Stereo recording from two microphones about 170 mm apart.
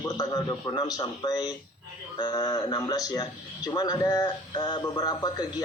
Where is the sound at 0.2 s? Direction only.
25° left (ahead or behind).